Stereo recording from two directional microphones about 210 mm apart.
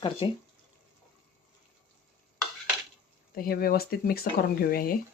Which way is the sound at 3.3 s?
45° left (ahead or behind).